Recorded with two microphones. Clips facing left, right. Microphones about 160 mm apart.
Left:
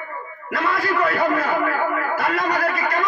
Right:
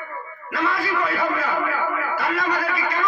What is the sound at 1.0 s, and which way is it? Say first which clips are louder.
Speech: left 6 dB; 50° left (ahead or behind).